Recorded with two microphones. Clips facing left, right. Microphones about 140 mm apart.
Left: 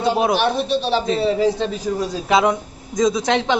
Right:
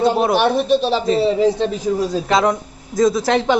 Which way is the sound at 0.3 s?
50° right (ahead or behind).